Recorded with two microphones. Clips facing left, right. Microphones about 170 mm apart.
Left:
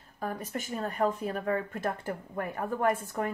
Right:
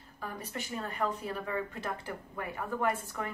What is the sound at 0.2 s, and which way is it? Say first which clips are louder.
Speech: left 5 dB; 45° left (ahead or behind).